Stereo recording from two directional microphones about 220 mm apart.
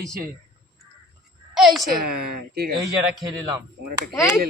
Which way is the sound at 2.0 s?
45° right (ahead or behind).